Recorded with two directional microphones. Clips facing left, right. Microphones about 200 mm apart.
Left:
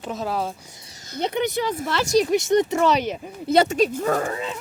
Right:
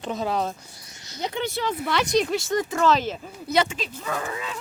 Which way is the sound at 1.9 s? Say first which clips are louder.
Left 2 dB; centre (ahead or behind).